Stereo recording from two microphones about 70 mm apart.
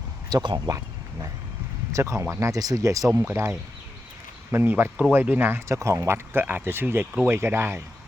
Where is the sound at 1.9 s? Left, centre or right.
Right.